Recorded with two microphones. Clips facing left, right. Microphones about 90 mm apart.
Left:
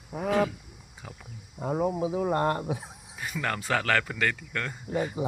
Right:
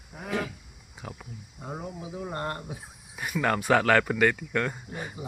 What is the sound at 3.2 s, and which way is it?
Speech, 5° right (ahead or behind).